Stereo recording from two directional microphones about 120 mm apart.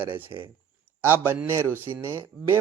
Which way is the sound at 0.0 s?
15° right (ahead or behind).